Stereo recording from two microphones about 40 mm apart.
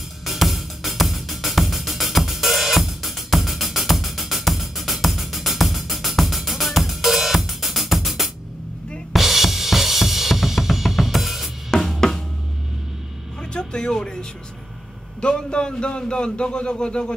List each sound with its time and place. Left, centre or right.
0.2 s music: centre
9.1 s drum kit: centre
11.7 s drum kit: centre
13.4 s music: left
15.1 s a man's voice: left